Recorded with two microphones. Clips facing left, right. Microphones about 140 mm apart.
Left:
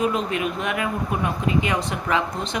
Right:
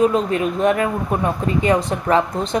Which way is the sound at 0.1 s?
35° right (ahead or behind).